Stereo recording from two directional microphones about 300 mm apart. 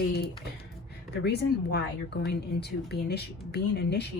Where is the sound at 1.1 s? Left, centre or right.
Left.